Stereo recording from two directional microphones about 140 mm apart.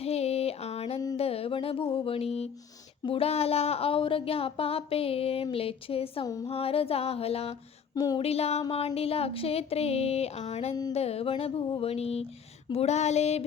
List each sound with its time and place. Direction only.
0.0 s a sound: 45° left (ahead or behind)
1.1 s mantra: 45° left (ahead or behind)
3.0 s speech: 40° left (ahead or behind)
6.2 s music: 25° left (ahead or behind)
6.5 s speech: 45° left (ahead or behind)
7.9 s music: 25° left (ahead or behind)
8.2 s speech: 45° left (ahead or behind)